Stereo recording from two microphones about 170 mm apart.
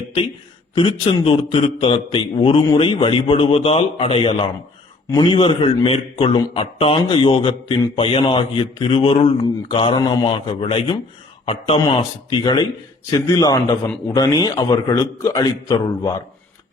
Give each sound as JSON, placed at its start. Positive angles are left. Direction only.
{"t": 0.8, "sound": "a man's voice", "side_deg": 30}